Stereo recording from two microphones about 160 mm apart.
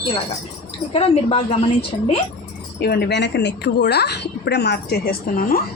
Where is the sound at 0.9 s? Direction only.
40° left (ahead or behind).